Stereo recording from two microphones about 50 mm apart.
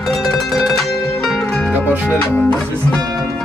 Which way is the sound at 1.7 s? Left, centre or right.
Right.